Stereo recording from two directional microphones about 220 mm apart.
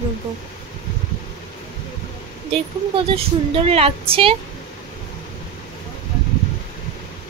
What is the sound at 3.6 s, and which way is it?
Speech, 25° right (ahead or behind).